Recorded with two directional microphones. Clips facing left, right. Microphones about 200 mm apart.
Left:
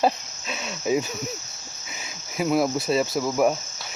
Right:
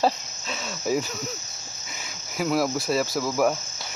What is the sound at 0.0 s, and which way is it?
Cricket, 15° left (ahead or behind).